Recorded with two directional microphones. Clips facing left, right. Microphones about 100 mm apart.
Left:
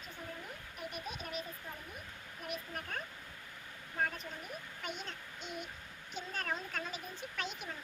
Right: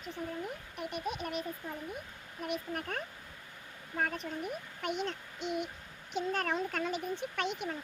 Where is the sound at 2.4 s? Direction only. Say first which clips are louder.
Right 7 dB; 80° right.